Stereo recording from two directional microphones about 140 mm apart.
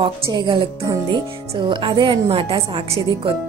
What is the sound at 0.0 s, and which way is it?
A woman's voice, 30° right (ahead or behind).